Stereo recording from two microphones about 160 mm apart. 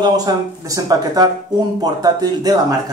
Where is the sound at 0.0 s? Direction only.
20° right (ahead or behind).